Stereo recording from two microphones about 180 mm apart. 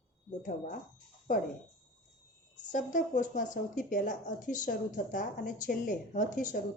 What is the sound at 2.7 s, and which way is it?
A woman's voice, 45° left (ahead or behind).